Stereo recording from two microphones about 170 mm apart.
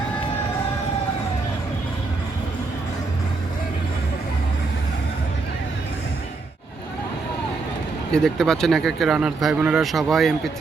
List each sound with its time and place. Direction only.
8.1 s speech: 5° left (ahead or behind)